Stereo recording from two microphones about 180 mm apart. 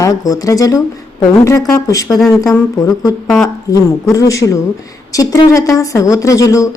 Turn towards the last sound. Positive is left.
turn(degrees=20)  # may be behind; listen again after turning